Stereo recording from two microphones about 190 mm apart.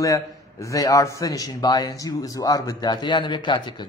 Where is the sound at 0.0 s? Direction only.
15° left (ahead or behind).